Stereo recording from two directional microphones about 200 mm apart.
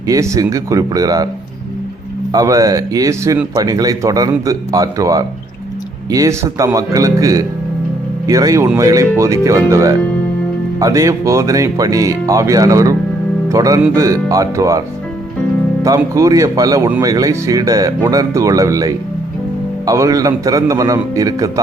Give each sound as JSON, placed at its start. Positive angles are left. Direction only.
{"t": 0.1, "sound": "speech", "side_deg": -15}
{"t": 2.3, "sound": "speech", "side_deg": -15}